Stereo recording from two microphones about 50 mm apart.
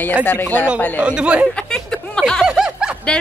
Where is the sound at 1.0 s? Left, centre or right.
Right.